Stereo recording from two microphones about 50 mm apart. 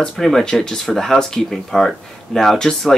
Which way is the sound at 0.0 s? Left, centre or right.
Centre.